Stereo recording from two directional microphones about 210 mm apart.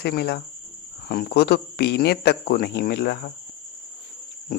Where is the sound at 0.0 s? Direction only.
50° left (ahead or behind).